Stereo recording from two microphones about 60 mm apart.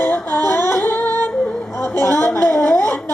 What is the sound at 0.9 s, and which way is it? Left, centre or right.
Singing, left.